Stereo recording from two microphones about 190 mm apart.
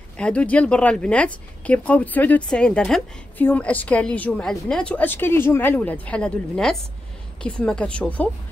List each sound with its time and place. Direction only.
0.2 s speech: 5° left (ahead or behind)